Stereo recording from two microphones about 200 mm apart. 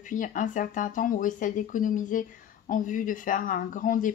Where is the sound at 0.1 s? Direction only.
40° left (ahead or behind).